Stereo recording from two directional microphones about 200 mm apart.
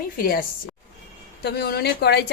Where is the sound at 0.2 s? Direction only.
45° left (ahead or behind).